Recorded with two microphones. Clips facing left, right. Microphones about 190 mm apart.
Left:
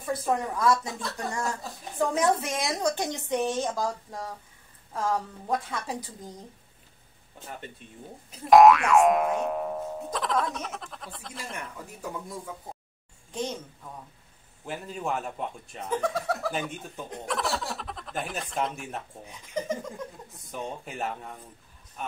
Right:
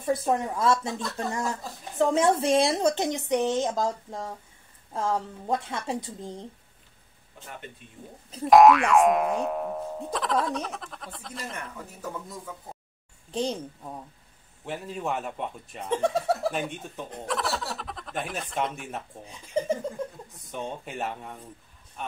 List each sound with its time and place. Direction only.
0.0 s a woman's voice: 25° right (ahead or behind)
8.5 s speech: centre (ahead or behind)
13.3 s a woman's voice: 30° right (ahead or behind)
14.6 s speech: centre (ahead or behind)
15.8 s a woman's voice: 30° right (ahead or behind)
16.7 s speech: centre (ahead or behind)
19.5 s laughter: 30° right (ahead or behind)
20.5 s speech: centre (ahead or behind)